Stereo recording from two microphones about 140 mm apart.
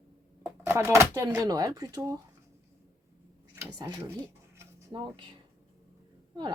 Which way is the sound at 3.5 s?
30° right (ahead or behind).